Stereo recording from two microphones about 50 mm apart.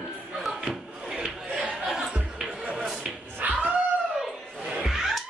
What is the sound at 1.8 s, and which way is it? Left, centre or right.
Music, centre.